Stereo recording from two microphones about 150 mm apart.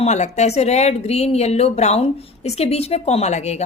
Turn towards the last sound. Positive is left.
turn(degrees=50)  # may be behind; listen again after turning